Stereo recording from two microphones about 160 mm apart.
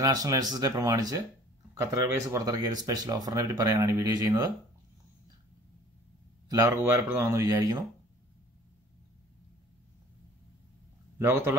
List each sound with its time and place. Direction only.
0.0 s speech: 20° right (ahead or behind)
6.5 s speech: 15° right (ahead or behind)
11.1 s a man's voice: 15° right (ahead or behind)